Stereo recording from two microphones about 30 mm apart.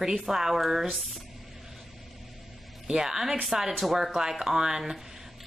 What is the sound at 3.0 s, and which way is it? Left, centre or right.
Speech, centre.